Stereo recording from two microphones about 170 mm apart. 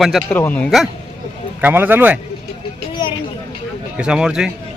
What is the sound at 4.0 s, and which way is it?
Speech, 5° right (ahead or behind).